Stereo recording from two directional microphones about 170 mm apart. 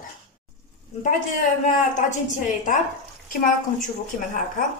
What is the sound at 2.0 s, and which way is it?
Speech, 50° left (ahead or behind).